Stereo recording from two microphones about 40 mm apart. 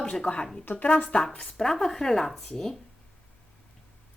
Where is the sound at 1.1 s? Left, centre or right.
Centre.